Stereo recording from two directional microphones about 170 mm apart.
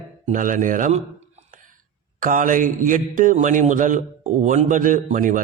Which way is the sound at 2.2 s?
50° right (ahead or behind).